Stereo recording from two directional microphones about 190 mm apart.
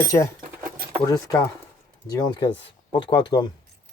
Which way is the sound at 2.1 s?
20° left (ahead or behind).